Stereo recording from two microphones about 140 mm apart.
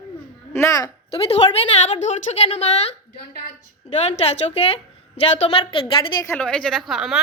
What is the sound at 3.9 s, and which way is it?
A woman's voice, 50° left (ahead or behind).